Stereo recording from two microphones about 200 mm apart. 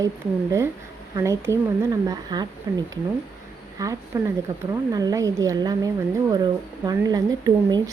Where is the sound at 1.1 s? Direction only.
15° right (ahead or behind).